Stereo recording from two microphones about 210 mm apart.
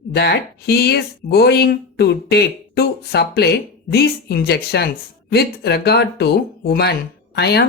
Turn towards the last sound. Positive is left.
turn(degrees=50)  # may be behind; listen again after turning